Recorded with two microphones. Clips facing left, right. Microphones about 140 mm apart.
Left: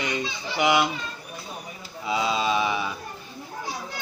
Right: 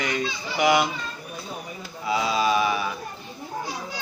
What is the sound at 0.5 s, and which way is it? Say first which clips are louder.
Speech: right 1 dB; 20° left (ahead or behind).